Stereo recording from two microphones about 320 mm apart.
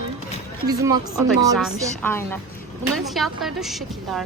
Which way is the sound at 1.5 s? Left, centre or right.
Centre.